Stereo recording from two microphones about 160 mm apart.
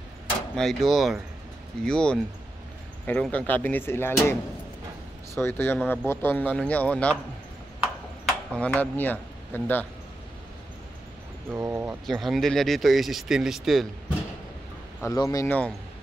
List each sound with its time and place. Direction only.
0.6 s speech: centre (ahead or behind)
5.3 s speech: 15° left (ahead or behind)
8.3 s speech: 10° left (ahead or behind)
11.5 s speech: 15° right (ahead or behind)
12.1 s speech: centre (ahead or behind)
15.0 s speech: 20° left (ahead or behind)